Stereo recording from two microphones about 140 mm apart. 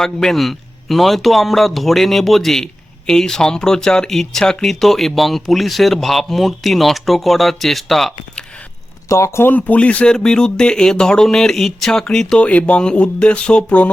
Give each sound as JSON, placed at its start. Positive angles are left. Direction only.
{"t": 0.0, "sound": "speech", "side_deg": 5}
{"t": 9.0, "sound": "speech", "side_deg": 20}